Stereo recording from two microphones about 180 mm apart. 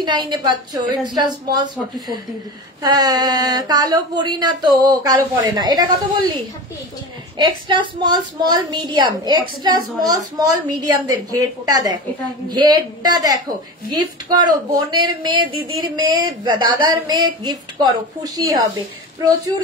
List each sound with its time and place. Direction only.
0.0 s speech: 25° right (ahead or behind)
7.3 s speech: 25° right (ahead or behind)